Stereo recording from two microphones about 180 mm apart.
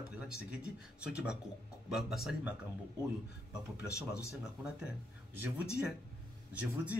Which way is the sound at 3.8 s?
15° left (ahead or behind).